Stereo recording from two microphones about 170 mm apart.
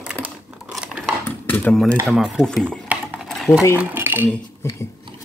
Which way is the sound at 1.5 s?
10° left (ahead or behind).